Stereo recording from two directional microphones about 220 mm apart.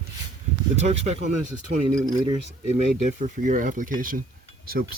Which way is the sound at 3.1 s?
35° right (ahead or behind).